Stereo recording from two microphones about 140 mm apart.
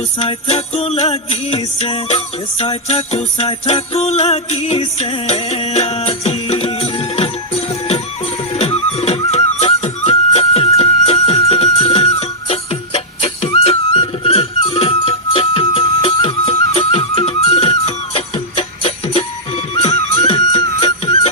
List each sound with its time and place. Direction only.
0.2 s music: 40° left (ahead or behind)
8.5 s music: 45° left (ahead or behind)